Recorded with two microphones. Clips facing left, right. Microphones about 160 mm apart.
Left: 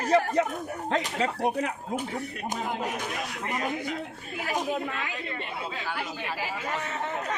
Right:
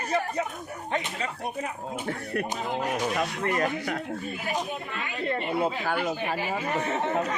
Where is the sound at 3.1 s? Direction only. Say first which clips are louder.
Right 6 dB; 55° right (ahead or behind).